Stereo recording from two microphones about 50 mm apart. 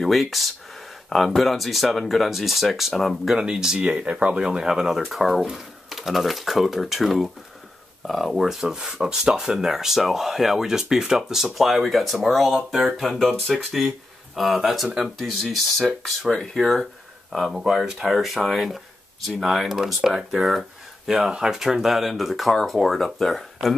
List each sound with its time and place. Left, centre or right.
0.0 s speech: centre
3.3 s speech: centre; by 4.4 s right
4.4 s speech: centre
17.6 s speech: centre
21.1 s speech: centre